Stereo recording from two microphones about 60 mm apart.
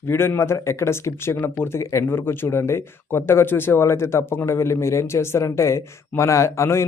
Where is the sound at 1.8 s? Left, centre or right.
Left.